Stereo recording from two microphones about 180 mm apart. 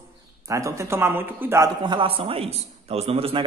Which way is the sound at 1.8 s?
30° right (ahead or behind).